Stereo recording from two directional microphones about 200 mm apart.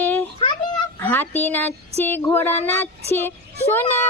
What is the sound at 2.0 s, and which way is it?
Child singing, 10° left (ahead or behind).